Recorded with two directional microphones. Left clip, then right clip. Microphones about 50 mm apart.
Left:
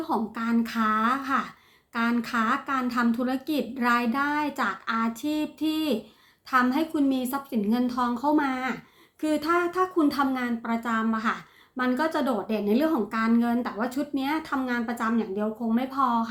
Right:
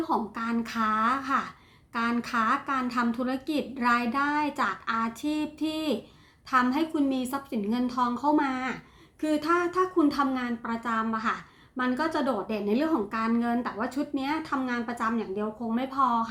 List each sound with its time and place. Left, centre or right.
0.0 s a woman's voice: centre